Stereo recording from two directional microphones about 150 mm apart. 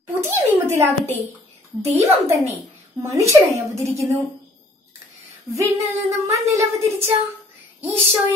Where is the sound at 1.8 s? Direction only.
45° right (ahead or behind).